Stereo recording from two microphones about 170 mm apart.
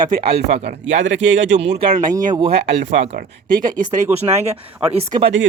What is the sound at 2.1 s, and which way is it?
Speech, 50° right (ahead or behind).